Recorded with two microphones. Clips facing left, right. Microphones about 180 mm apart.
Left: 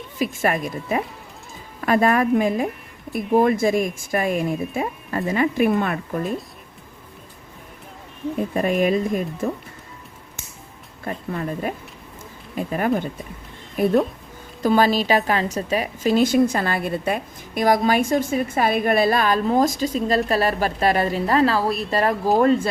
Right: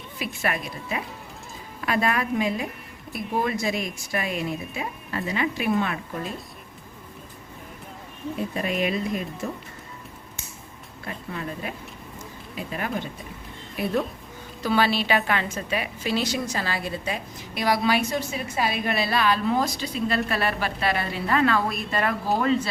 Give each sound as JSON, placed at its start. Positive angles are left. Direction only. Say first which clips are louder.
{"t": 0.2, "sound": "a woman's voice", "louder": "left 7 dB", "side_deg": 45}
{"t": 8.4, "sound": "a woman's voice", "louder": "left 6 dB", "side_deg": 45}
{"t": 11.0, "sound": "a woman's voice", "louder": "left 6 dB", "side_deg": 45}
{"t": 22.4, "sound": "a woman's voice", "louder": "left 7 dB", "side_deg": 50}